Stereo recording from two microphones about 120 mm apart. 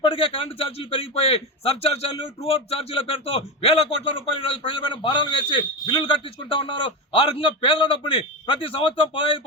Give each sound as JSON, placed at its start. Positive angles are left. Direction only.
{"t": 0.0, "sound": "a man's voice", "side_deg": 50}